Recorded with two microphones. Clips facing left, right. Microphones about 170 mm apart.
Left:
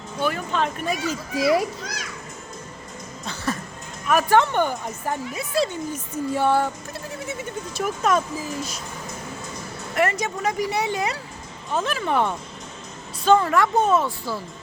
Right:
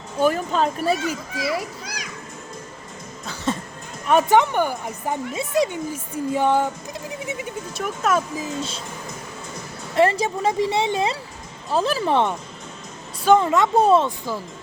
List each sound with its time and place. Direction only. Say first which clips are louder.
0.2 s a child's voice: right 4 dB; 40° right (ahead or behind)
1.8 s children playing: left 1 dB; 10° right (ahead or behind)
3.5 s a sound: right 3 dB; 25° right (ahead or behind)
4.1 s speech: right 2 dB; 20° right (ahead or behind)
7.1 s a sound: right 1 dB; 15° right (ahead or behind)
7.7 s speech: left 1 dB; centre (ahead or behind)
8.4 s speech: right 2 dB; 25° right (ahead or behind)
9.9 s a child's voice: right 4 dB; 30° right (ahead or behind)
13.2 s speech: right 1 dB; 20° right (ahead or behind)